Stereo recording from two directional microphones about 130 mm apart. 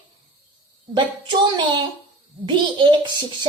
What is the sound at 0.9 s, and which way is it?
A woman's voice, 35° right (ahead or behind).